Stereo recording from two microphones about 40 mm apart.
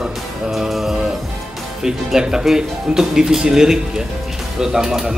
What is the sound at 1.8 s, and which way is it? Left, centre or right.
Speech, centre.